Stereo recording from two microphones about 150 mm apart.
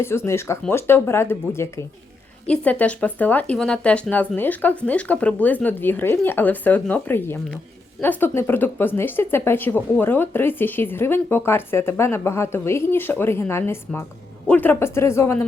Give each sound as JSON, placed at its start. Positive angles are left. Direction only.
{"t": 0.0, "sound": "speech", "side_deg": 15}